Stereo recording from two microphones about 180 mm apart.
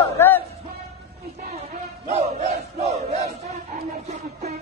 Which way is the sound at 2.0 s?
40° right (ahead or behind).